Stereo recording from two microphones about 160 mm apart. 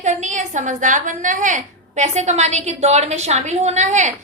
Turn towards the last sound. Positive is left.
turn(degrees=-50)  # may be behind; listen again after turning